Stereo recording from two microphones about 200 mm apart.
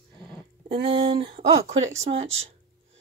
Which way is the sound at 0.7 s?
25° right (ahead or behind).